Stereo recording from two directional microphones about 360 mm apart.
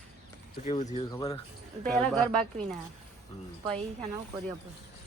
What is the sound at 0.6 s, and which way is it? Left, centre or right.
Speech, centre.